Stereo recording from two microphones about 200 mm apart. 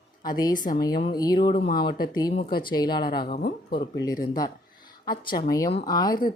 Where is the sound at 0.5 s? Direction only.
40° left (ahead or behind).